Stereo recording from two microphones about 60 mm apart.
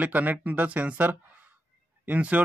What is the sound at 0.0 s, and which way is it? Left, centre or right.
A man's voice, right.